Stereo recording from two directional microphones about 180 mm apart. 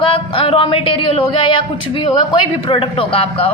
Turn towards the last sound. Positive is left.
turn(degrees=30)  # may be behind; listen again after turning